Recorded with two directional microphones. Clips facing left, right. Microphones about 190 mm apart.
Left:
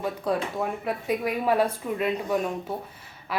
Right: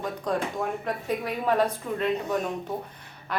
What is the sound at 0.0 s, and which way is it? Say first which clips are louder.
A woman's voice: left 1 dB; 10° left (ahead or behind).